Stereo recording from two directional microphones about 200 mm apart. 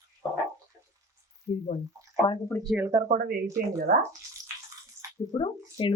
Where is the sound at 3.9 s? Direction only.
50° right (ahead or behind).